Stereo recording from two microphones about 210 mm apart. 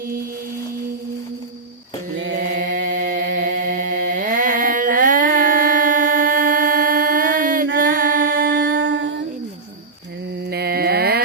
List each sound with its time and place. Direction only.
2.3 s chant: 40° right (ahead or behind)
8.8 s humming: 60° right (ahead or behind)
10.5 s a sound: 50° right (ahead or behind)